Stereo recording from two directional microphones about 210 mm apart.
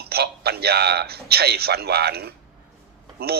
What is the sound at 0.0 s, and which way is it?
A man's voice, 50° right (ahead or behind).